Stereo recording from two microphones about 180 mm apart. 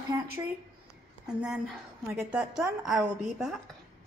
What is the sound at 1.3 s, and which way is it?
A woman's voice, 5° right (ahead or behind).